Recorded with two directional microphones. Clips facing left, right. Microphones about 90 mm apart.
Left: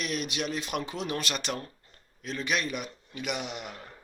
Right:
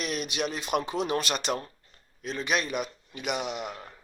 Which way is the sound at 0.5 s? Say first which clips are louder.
Right 4 dB; 25° right (ahead or behind).